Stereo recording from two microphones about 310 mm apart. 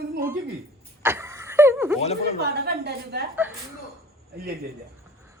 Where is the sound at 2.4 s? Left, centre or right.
Right.